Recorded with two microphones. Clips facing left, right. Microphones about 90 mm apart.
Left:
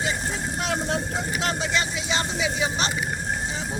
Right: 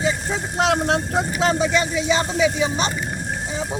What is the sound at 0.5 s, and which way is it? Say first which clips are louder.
Vehicle: right 9 dB; 90° right.